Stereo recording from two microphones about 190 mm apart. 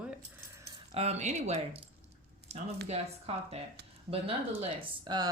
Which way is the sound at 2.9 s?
35° right (ahead or behind).